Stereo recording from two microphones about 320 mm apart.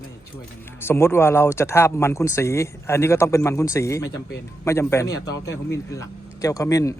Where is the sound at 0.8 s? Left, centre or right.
Centre.